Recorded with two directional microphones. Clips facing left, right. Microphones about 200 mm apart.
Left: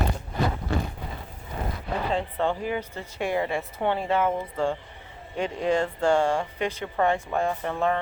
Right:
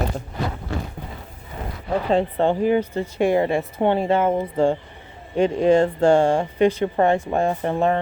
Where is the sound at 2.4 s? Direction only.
25° right (ahead or behind).